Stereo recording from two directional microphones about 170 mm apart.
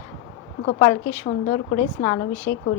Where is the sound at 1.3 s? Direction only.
35° left (ahead or behind).